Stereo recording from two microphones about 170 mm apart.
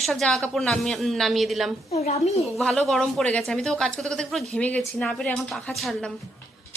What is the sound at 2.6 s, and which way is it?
Speech, centre (ahead or behind).